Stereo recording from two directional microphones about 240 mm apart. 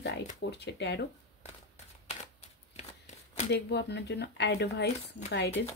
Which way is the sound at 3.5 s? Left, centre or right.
Left.